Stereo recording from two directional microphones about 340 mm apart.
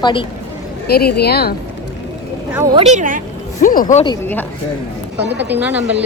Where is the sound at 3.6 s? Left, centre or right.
Left.